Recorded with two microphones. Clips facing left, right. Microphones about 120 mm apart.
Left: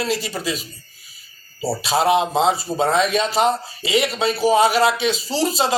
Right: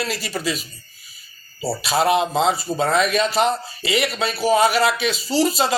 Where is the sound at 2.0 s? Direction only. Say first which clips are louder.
Left 2 dB; 25° left (ahead or behind).